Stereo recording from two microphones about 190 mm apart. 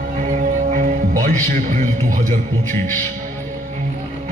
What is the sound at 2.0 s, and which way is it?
Speech, 45° right (ahead or behind).